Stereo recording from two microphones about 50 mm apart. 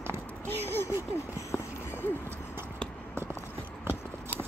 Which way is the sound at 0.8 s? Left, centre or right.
Left.